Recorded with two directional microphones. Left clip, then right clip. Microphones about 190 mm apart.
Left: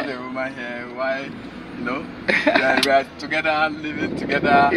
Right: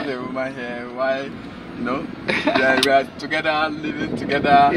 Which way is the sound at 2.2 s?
20° left (ahead or behind).